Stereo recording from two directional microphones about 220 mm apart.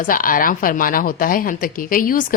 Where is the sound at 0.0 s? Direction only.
40° left (ahead or behind).